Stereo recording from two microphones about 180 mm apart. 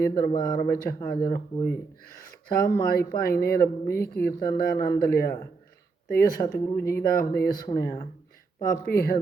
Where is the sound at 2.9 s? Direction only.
55° left (ahead or behind).